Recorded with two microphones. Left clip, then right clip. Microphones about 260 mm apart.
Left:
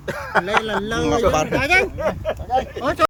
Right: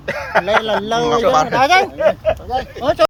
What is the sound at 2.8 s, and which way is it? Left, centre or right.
Speech, centre.